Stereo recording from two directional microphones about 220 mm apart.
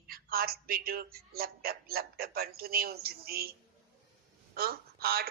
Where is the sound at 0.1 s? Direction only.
45° right (ahead or behind).